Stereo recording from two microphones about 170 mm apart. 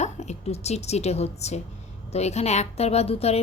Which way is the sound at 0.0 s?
40° left (ahead or behind).